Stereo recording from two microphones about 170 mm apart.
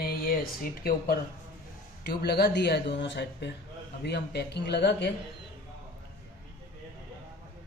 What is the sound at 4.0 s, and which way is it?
Speech, 75° left (ahead or behind).